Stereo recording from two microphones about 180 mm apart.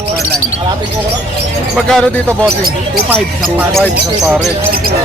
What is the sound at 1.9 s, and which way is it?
Speech, 5° left (ahead or behind).